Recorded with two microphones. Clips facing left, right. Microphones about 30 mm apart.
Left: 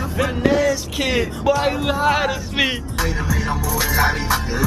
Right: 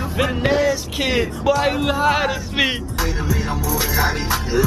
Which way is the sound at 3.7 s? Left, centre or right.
Centre.